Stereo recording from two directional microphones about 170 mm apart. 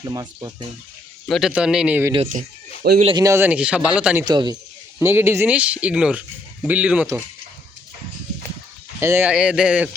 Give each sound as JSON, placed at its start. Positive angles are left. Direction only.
{"t": 0.1, "sound": "speech", "side_deg": -20}
{"t": 1.3, "sound": "a man's voice", "side_deg": 0}
{"t": 2.3, "sound": "speech", "side_deg": -50}
{"t": 3.0, "sound": "speech", "side_deg": -30}
{"t": 3.2, "sound": "speech", "side_deg": -15}
{"t": 4.3, "sound": "speech", "side_deg": -25}
{"t": 4.9, "sound": "speech", "side_deg": -15}
{"t": 9.0, "sound": "speech", "side_deg": -15}